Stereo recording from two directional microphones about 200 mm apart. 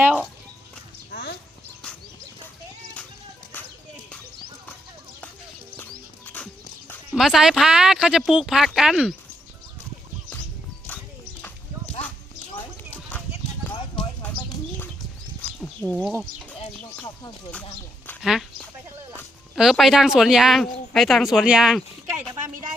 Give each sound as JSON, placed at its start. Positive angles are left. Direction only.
{"t": 1.1, "sound": "horse", "side_deg": 55}
{"t": 6.2, "sound": "speech", "side_deg": 5}
{"t": 12.9, "sound": "clip-clop", "side_deg": 5}
{"t": 15.4, "sound": "bird", "side_deg": 5}
{"t": 16.6, "sound": "speech", "side_deg": 20}
{"t": 18.0, "sound": "a sound", "side_deg": 10}
{"t": 19.5, "sound": "speech", "side_deg": 0}